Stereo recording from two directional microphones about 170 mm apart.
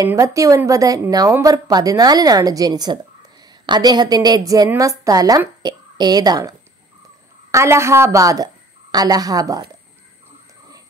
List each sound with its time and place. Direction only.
0.0 s a woman's voice: 20° right (ahead or behind)
7.5 s a woman's voice: 15° right (ahead or behind)